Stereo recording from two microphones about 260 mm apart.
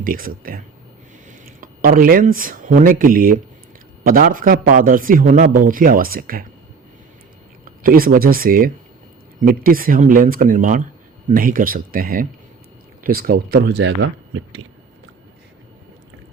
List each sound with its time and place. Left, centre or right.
0.0 s a man's voice: right
7.6 s a man's voice: right